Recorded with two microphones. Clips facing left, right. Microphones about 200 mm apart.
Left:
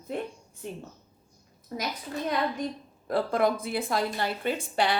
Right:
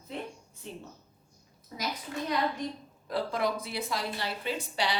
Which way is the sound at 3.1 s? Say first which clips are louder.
Left 5 dB; 50° left (ahead or behind).